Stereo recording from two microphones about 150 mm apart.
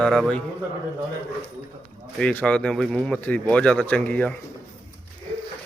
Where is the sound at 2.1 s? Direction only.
5° left (ahead or behind).